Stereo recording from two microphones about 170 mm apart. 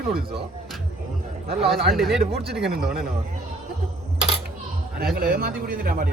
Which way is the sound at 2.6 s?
65° right (ahead or behind).